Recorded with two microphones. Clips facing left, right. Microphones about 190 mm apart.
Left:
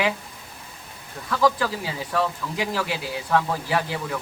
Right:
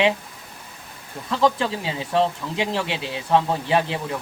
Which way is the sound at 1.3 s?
25° right (ahead or behind).